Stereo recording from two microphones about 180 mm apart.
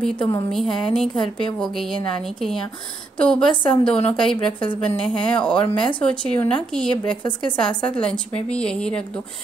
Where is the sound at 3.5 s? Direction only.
30° left (ahead or behind).